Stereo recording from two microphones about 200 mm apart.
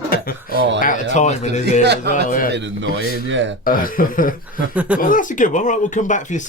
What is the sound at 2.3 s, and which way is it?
Speech, 45° left (ahead or behind).